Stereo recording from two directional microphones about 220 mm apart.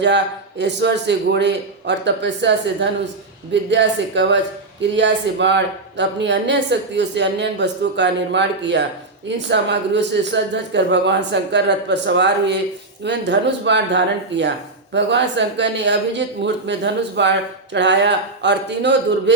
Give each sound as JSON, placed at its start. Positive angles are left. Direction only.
{"t": 0.6, "sound": "speech", "side_deg": -50}